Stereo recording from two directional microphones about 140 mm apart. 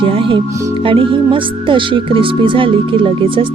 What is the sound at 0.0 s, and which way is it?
Speech, 40° right (ahead or behind).